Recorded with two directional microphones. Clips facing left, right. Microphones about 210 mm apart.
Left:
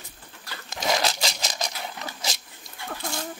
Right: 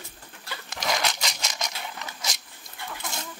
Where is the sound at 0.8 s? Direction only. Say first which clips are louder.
Left 3 dB; 30° left (ahead or behind).